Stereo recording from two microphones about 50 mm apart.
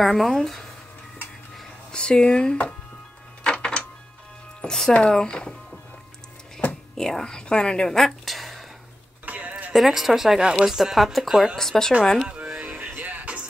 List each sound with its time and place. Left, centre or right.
0.0 s speech: centre
1.9 s a woman's voice: centre
3.4 s a sound: centre
4.6 s a woman's voice: centre
7.0 s a woman's voice: centre
8.0 s a sound: centre
9.2 s music: right
9.8 s speech: centre
11.5 s a woman's voice: centre
12.4 s music: centre
12.7 s music: right